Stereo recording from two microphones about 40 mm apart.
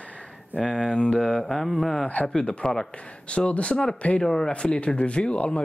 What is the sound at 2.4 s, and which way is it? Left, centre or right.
Speech, left.